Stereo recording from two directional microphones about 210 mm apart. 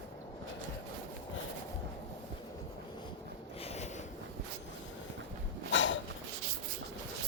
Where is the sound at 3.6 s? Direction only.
30° left (ahead or behind).